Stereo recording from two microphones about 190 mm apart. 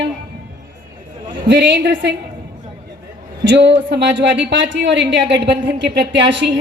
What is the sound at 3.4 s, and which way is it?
A woman's voice, 65° right (ahead or behind).